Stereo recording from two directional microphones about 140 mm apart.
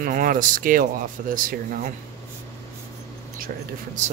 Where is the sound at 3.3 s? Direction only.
90° right.